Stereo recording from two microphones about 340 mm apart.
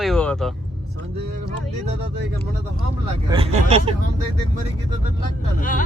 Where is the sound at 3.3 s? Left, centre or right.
Centre.